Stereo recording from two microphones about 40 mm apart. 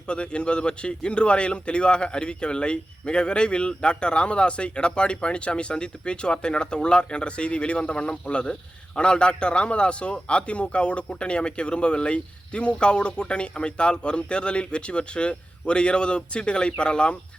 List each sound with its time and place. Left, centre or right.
0.1 s a man's voice: left